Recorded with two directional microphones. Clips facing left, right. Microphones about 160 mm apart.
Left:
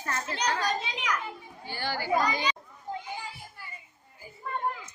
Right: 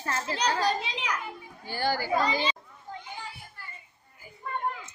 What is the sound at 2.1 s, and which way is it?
Speech, 30° right (ahead or behind).